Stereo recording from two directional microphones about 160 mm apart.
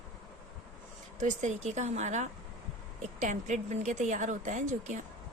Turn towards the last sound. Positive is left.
turn(degrees=-50)  # may be behind; listen again after turning